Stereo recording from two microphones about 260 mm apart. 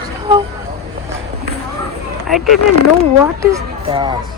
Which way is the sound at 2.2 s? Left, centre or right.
Centre.